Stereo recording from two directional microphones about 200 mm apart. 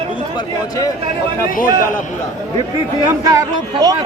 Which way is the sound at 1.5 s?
45° left (ahead or behind).